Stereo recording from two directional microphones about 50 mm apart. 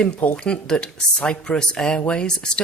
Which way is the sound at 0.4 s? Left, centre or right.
Centre.